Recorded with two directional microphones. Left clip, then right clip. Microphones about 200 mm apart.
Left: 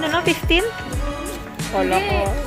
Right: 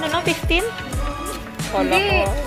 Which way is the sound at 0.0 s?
20° left (ahead or behind).